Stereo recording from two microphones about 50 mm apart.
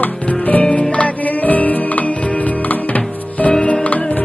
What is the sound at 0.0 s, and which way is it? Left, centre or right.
Music, left.